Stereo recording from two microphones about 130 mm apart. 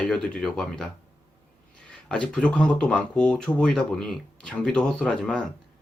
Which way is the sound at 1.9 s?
5° left (ahead or behind).